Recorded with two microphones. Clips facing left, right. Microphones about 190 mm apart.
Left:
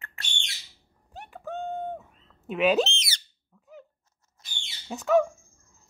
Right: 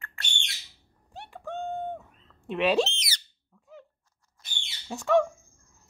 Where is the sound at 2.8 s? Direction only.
25° left (ahead or behind).